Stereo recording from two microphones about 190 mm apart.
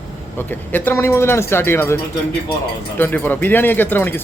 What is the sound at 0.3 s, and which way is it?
A man's voice, 10° left (ahead or behind).